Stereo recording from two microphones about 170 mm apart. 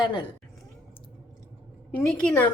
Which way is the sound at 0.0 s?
25° left (ahead or behind).